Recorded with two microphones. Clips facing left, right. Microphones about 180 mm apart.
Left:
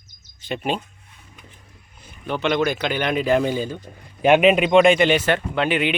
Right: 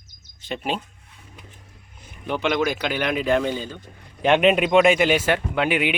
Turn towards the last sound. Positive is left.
turn(degrees=-10)  # may be behind; listen again after turning